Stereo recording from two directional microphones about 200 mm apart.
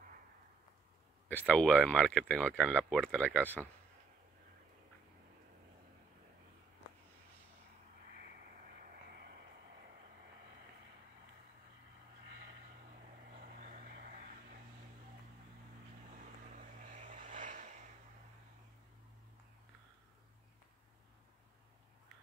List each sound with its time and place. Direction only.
1.5 s speech: 5° left (ahead or behind)
13.3 s vehicle: 45° right (ahead or behind)
16.5 s vehicle: 40° right (ahead or behind)